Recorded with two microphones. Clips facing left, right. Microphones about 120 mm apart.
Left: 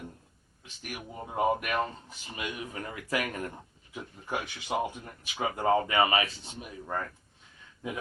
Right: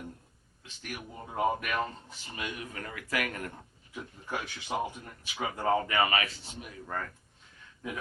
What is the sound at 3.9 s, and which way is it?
Speech, 10° left (ahead or behind).